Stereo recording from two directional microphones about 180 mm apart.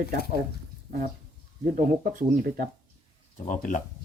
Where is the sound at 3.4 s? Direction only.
45° left (ahead or behind).